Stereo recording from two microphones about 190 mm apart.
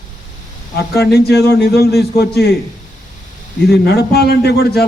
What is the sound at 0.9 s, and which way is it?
A man's voice, 60° left (ahead or behind).